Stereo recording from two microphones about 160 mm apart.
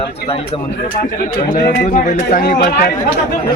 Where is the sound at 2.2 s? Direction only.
70° left (ahead or behind).